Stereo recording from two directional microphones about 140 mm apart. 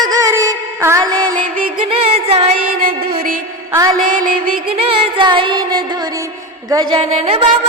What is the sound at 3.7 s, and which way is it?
Music, 25° right (ahead or behind).